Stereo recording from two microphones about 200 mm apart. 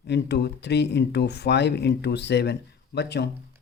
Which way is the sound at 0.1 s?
55° left (ahead or behind).